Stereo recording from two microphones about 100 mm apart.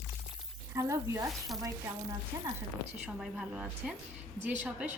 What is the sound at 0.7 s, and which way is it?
Speech, 30° right (ahead or behind).